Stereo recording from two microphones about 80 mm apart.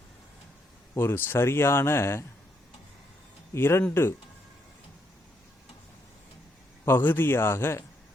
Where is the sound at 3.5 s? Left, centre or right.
Left.